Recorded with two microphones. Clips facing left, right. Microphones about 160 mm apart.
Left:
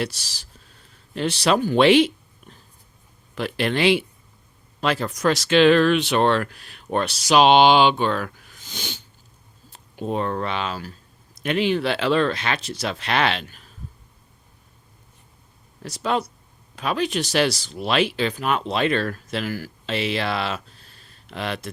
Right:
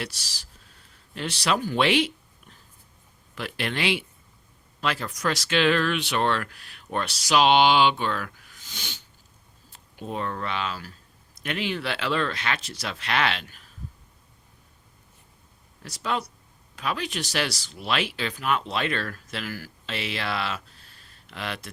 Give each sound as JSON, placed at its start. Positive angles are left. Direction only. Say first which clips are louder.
{"t": 0.0, "sound": "speech", "louder": "left 7 dB", "side_deg": 25}
{"t": 1.6, "sound": "a sound", "louder": "left 9 dB", "side_deg": 25}
{"t": 3.3, "sound": "speech", "louder": "left 7 dB", "side_deg": 30}
{"t": 15.8, "sound": "speech", "louder": "left 5 dB", "side_deg": 25}